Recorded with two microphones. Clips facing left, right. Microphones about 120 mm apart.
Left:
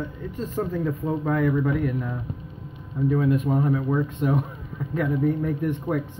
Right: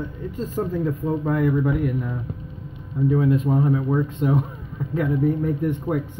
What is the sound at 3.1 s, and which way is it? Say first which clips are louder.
Speech: right 2 dB; 25° right (ahead or behind).